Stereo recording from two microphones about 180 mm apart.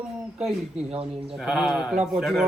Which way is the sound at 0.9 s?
30° right (ahead or behind).